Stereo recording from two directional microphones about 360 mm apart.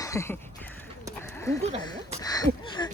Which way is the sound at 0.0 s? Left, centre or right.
Centre.